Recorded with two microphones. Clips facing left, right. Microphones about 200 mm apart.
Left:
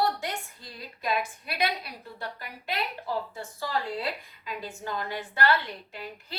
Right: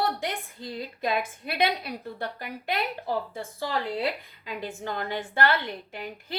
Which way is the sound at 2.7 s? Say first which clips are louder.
Right 3 dB; 55° right (ahead or behind).